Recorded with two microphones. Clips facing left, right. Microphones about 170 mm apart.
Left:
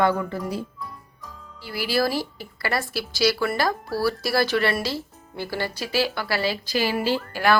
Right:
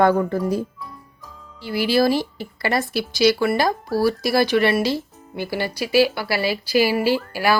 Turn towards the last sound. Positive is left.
turn(degrees=-10)  # may be behind; listen again after turning